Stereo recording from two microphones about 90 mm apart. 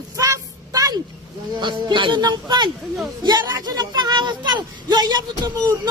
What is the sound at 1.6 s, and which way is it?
Speech, 65° right (ahead or behind).